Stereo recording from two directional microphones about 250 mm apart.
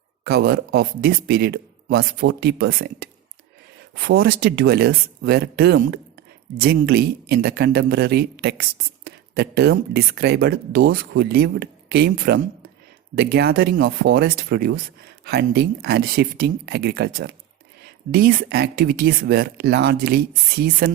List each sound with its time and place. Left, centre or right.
0.3 s speech: right